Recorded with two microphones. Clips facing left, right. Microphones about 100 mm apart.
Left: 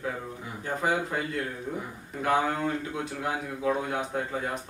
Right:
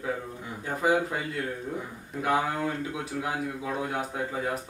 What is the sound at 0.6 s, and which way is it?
Speech, 5° right (ahead or behind).